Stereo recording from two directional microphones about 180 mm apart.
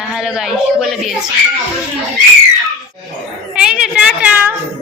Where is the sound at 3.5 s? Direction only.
5° right (ahead or behind).